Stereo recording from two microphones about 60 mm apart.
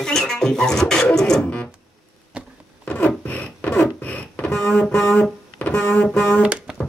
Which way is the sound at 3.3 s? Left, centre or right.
Left.